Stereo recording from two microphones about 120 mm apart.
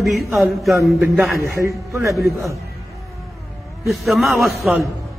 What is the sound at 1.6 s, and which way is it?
Speech, 25° right (ahead or behind).